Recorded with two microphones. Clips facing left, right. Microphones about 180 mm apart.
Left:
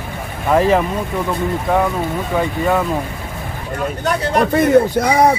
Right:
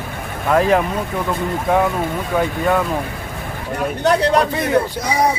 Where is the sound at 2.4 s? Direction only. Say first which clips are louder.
Even; centre (ahead or behind).